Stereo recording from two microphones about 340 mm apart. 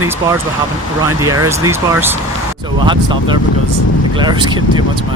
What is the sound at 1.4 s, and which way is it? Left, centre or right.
Speech, centre.